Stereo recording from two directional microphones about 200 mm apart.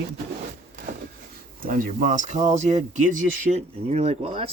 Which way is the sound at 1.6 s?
40° right (ahead or behind).